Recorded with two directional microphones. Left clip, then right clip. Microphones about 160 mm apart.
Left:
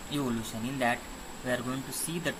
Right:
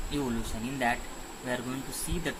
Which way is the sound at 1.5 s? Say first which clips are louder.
Left 2 dB; 10° left (ahead or behind).